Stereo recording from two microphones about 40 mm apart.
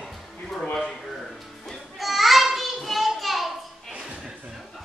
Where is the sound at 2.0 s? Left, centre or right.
Centre.